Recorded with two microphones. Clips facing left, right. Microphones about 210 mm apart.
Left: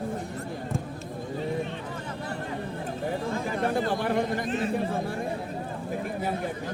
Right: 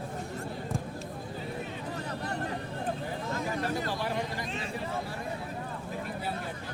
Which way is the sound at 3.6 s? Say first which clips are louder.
Left 6 dB; 55° left (ahead or behind).